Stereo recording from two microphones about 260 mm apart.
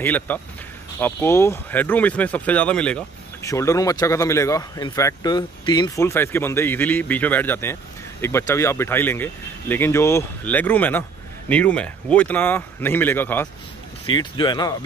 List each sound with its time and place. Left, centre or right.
0.0 s speech: centre